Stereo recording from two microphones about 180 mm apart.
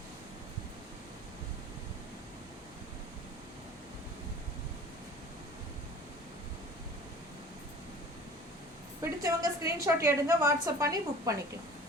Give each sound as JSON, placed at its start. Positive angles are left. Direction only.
{"t": 9.0, "sound": "a woman's voice", "side_deg": -20}